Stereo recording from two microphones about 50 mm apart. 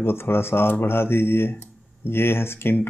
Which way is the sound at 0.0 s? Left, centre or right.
Left.